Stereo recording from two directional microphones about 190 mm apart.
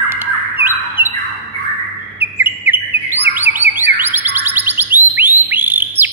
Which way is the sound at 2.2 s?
10° right (ahead or behind).